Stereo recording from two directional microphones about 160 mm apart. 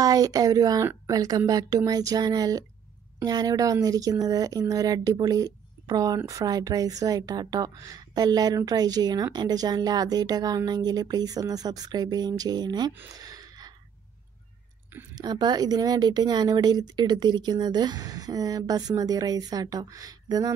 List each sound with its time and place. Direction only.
0.0 s speech: 20° right (ahead or behind)
13.1 s a sound: 25° right (ahead or behind)
15.1 s speech: 25° right (ahead or behind)